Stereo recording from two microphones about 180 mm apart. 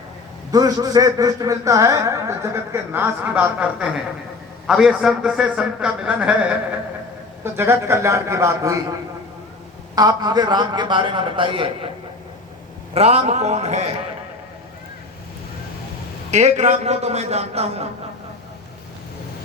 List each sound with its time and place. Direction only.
0.5 s a man's voice: 20° right (ahead or behind)
9.9 s a man's voice: 20° right (ahead or behind)
12.9 s a man's voice: 35° right (ahead or behind)
16.3 s a man's voice: 40° right (ahead or behind)